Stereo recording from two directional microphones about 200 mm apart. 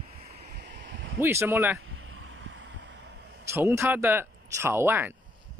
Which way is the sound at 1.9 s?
75° right (ahead or behind).